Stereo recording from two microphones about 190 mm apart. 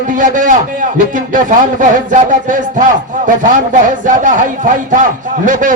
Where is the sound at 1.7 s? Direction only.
40° right (ahead or behind).